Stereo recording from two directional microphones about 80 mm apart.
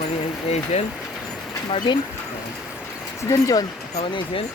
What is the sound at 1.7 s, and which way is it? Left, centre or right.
Speech, left.